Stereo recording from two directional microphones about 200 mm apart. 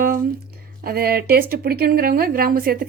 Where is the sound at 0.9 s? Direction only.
50° right (ahead or behind).